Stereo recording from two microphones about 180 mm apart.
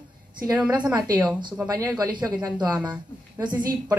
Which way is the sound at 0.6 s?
20° right (ahead or behind).